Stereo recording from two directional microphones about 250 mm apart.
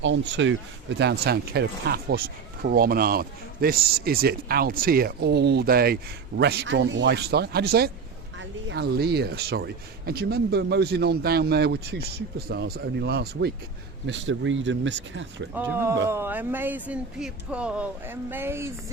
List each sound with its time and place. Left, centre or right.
0.0 s speech: right
15.5 s speech: centre